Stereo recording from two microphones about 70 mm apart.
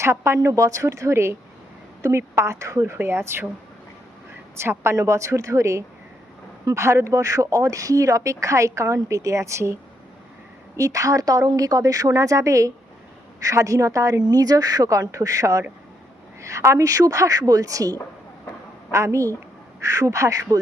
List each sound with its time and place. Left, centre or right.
0.0 s a woman's voice: right
4.5 s speech: right
10.8 s speech: right
14.3 s a woman's voice: right
18.9 s a woman's voice: right